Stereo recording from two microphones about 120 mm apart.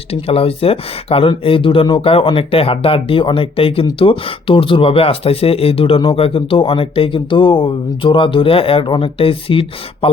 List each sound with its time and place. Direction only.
0.1 s speech: 55° left (ahead or behind)